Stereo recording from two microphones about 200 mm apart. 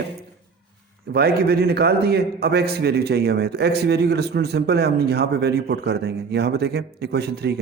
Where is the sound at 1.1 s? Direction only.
50° right (ahead or behind).